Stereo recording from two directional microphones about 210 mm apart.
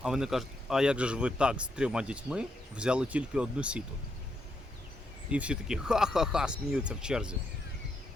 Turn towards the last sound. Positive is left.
turn(degrees=-5)  # may be behind; listen again after turning